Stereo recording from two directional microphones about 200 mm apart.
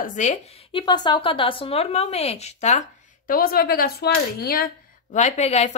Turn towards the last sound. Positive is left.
turn(degrees=35)  # may be behind; listen again after turning